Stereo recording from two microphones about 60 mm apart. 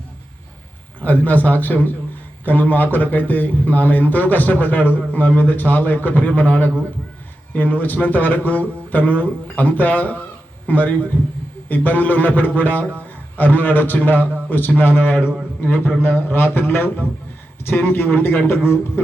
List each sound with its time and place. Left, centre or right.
1.0 s a man's voice: left
15.2 s a man's voice: centre
15.6 s a man's voice: left